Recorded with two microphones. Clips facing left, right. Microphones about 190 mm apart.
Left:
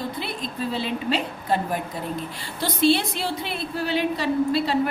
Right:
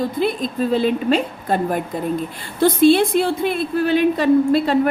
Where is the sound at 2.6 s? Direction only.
50° right (ahead or behind).